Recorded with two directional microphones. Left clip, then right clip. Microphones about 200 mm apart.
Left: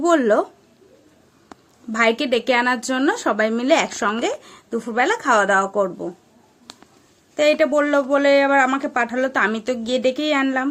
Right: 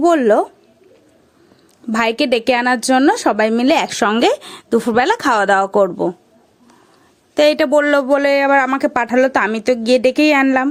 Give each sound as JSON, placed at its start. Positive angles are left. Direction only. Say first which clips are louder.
{"t": 0.0, "sound": "a woman's voice", "louder": "right 4 dB", "side_deg": -35}
{"t": 1.9, "sound": "a woman's voice", "louder": "right 3 dB", "side_deg": -40}
{"t": 7.3, "sound": "speech", "louder": "right 4 dB", "side_deg": -50}